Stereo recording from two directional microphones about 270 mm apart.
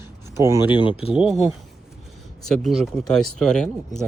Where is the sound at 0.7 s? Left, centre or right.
Centre.